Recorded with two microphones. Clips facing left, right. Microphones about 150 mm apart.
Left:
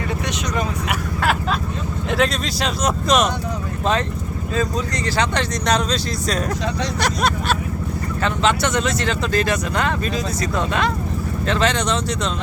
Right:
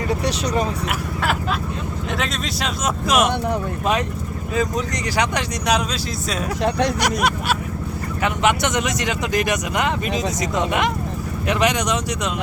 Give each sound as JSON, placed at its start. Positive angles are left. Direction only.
{"t": 2.1, "sound": "speech", "side_deg": 0}
{"t": 5.1, "sound": "speech", "side_deg": -15}
{"t": 8.2, "sound": "speech", "side_deg": -15}
{"t": 11.4, "sound": "speech", "side_deg": -15}